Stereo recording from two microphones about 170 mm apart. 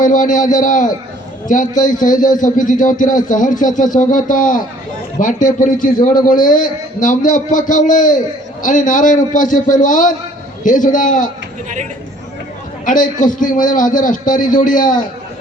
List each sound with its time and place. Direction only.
0.0 s a man's voice: 50° left (ahead or behind)
12.8 s a man's voice: 50° left (ahead or behind)